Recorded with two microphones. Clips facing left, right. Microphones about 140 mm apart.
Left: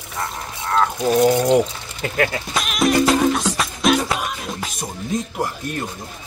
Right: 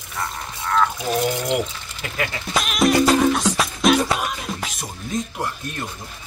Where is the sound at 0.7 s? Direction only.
35° left (ahead or behind).